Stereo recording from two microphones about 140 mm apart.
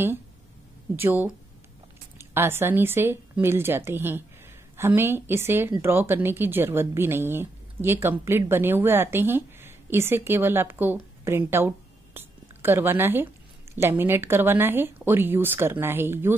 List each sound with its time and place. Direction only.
0.9 s a woman's voice: 15° right (ahead or behind)